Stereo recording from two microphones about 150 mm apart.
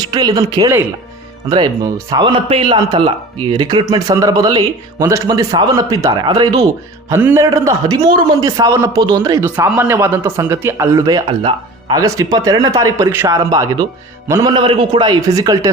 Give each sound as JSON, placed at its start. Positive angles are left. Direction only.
{"t": 0.0, "sound": "a man's voice", "side_deg": -25}
{"t": 9.6, "sound": "speech", "side_deg": -10}
{"t": 11.3, "sound": "speech", "side_deg": -35}
{"t": 11.9, "sound": "speech", "side_deg": -25}
{"t": 14.5, "sound": "speech", "side_deg": -35}